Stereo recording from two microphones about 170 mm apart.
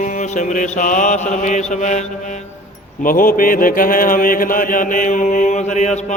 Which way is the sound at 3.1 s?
55° left (ahead or behind).